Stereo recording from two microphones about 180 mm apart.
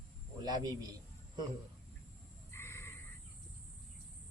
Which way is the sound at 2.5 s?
15° left (ahead or behind).